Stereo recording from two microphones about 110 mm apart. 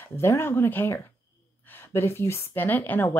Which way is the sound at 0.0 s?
20° left (ahead or behind).